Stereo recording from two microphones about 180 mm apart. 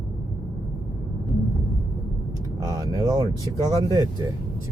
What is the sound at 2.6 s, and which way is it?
Vehicle, 20° right (ahead or behind).